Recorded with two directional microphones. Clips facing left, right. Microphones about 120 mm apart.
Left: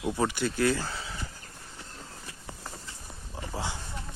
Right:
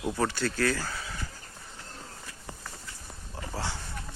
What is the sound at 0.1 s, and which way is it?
Speech, 15° left (ahead or behind).